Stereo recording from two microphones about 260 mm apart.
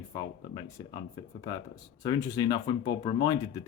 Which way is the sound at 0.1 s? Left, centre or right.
Centre.